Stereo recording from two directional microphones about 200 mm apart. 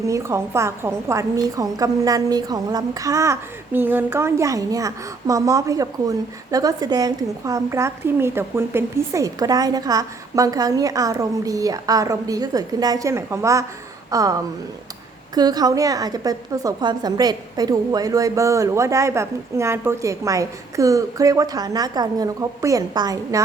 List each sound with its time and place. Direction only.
0.0 s a woman's voice: 15° right (ahead or behind)
15.4 s a woman's voice: 20° right (ahead or behind)